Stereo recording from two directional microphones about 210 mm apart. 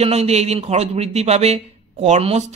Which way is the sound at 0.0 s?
30° right (ahead or behind).